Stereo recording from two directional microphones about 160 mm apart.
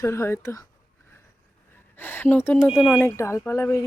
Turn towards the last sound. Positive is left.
turn(degrees=15)  # may be behind; listen again after turning